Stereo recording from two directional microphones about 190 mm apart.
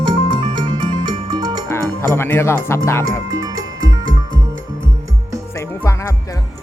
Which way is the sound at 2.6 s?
15° left (ahead or behind).